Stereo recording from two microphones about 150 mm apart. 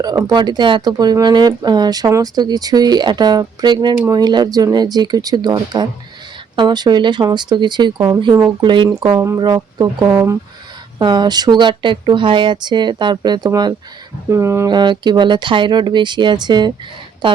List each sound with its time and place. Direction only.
0.0 s speech: 25° right (ahead or behind)
11.0 s speech: 30° right (ahead or behind)